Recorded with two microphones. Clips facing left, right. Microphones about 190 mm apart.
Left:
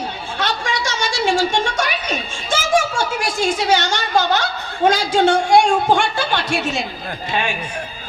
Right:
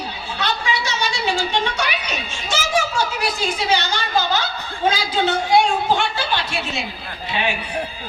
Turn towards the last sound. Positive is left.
turn(degrees=45)  # may be behind; listen again after turning